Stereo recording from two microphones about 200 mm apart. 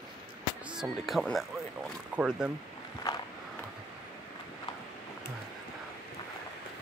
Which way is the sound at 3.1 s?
20° left (ahead or behind).